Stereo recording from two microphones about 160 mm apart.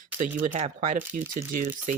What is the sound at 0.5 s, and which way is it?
Speech, 45° right (ahead or behind).